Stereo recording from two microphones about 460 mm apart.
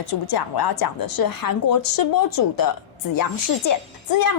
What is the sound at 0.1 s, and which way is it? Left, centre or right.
A woman's voice, left.